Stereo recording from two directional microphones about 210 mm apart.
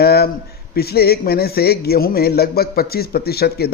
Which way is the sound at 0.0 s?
50° left (ahead or behind).